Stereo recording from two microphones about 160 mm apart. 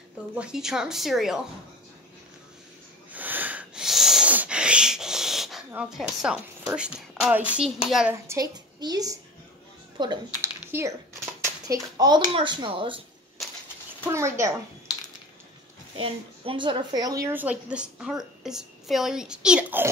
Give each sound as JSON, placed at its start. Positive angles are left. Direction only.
{"t": 0.4, "sound": "a woman's voice", "side_deg": -5}
{"t": 3.1, "sound": "sneeze", "side_deg": -10}
{"t": 5.7, "sound": "a woman's voice", "side_deg": -5}
{"t": 8.3, "sound": "a woman's voice", "side_deg": -25}
{"t": 10.7, "sound": "a child's voice", "side_deg": -15}
{"t": 14.0, "sound": "a woman's voice", "side_deg": -15}
{"t": 16.0, "sound": "a woman's voice", "side_deg": -30}